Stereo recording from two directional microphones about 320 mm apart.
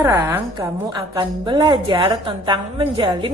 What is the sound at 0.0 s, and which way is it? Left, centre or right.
A woman's voice, centre.